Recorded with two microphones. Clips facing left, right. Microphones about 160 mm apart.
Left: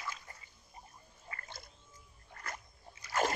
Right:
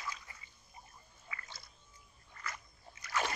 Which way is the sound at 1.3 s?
50° left (ahead or behind).